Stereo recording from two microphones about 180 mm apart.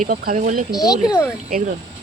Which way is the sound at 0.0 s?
50° right (ahead or behind).